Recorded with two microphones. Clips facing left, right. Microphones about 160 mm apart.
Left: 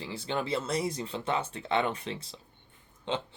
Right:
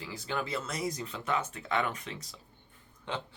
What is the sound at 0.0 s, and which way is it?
Speech, 25° left (ahead or behind).